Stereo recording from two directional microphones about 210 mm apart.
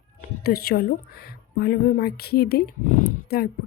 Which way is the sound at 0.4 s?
45° left (ahead or behind).